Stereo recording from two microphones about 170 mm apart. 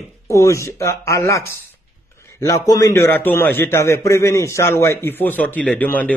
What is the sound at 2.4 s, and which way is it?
Speech, 20° left (ahead or behind).